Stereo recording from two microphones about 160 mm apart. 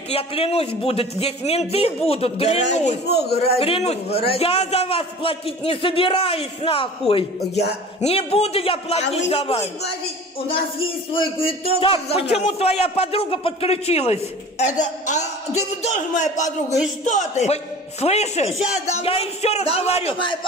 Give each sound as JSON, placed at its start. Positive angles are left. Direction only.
{"t": 0.1, "sound": "a man's voice", "side_deg": 40}
{"t": 3.1, "sound": "a man's voice", "side_deg": 90}
{"t": 3.5, "sound": "a man's voice", "side_deg": 35}
{"t": 11.3, "sound": "a man's voice", "side_deg": 35}